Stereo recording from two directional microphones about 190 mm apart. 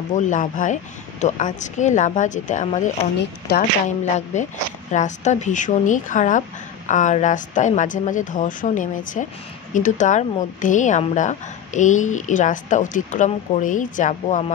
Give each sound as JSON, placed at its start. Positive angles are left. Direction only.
{"t": 0.1, "sound": "a woman's voice", "side_deg": 40}
{"t": 3.2, "sound": "a woman's voice", "side_deg": 55}
{"t": 4.0, "sound": "a woman's voice", "side_deg": 40}